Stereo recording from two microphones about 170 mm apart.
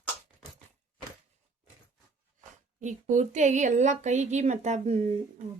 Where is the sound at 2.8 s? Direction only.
45° right (ahead or behind).